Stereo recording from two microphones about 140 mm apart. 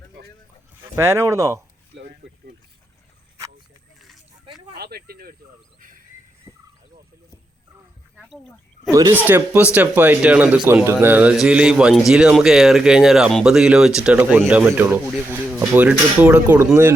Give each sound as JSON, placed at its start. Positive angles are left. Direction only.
{"t": 0.9, "sound": "speech", "side_deg": -20}
{"t": 4.9, "sound": "speech", "side_deg": -90}
{"t": 8.1, "sound": "a sound", "side_deg": 0}
{"t": 8.9, "sound": "a man's voice", "side_deg": -20}